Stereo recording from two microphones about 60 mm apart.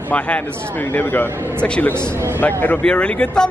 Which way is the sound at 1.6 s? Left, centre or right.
Centre.